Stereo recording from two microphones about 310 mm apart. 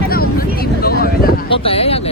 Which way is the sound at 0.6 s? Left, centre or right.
Left.